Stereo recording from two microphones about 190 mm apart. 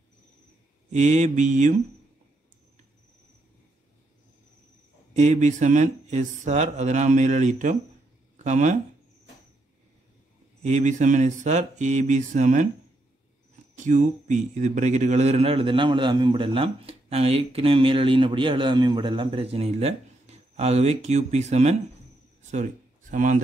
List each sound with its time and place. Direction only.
0.9 s a man's voice: 40° right (ahead or behind)
5.1 s a man's voice: 40° right (ahead or behind)
10.6 s a man's voice: 40° right (ahead or behind)
13.7 s a man's voice: 40° right (ahead or behind)